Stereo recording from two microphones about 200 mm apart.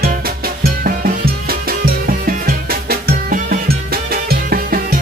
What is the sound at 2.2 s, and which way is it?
Music, 50° right (ahead or behind).